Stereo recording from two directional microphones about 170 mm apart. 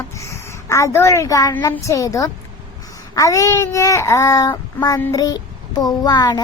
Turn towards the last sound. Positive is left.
turn(degrees=25)  # may be behind; listen again after turning